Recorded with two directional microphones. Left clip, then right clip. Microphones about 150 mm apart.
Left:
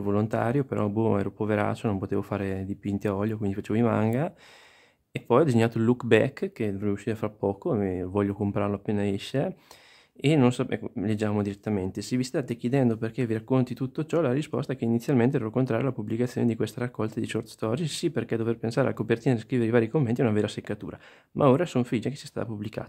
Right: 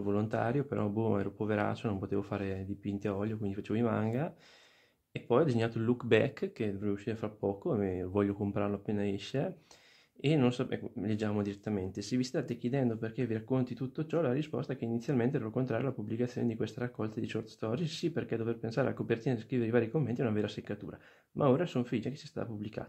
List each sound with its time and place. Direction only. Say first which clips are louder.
0.0 s speech: left 6 dB; 45° left (ahead or behind)